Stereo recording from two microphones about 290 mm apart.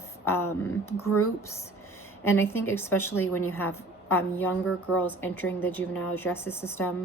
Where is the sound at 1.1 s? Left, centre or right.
Left.